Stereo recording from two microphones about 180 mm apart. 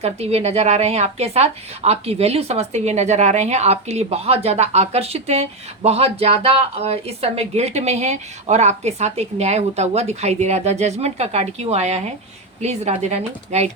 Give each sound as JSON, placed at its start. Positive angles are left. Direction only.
{"t": 0.0, "sound": "speech", "side_deg": -35}